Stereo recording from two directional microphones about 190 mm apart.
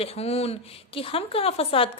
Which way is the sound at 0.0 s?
30° left (ahead or behind).